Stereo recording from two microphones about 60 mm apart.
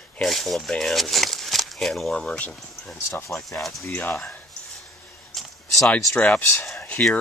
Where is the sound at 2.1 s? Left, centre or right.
Centre.